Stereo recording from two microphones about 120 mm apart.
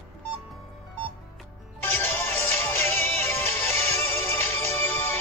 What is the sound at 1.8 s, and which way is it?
Music, 15° left (ahead or behind).